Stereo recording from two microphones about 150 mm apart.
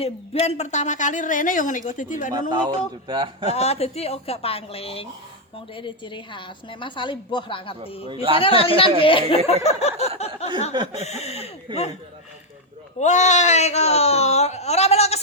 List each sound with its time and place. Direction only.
0.0 s speech: 45° left (ahead or behind); by 2.3 s 60° left (ahead or behind)
2.5 s a man's voice: 30° right (ahead or behind)
3.5 s a woman's voice: 45° left (ahead or behind)
8.0 s a man's voice: 35° right (ahead or behind)
8.4 s a woman's voice: 35° left (ahead or behind)
13.0 s speech: 50° left (ahead or behind)